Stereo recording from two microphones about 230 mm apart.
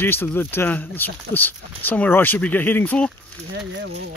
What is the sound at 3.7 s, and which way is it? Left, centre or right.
Speech, right.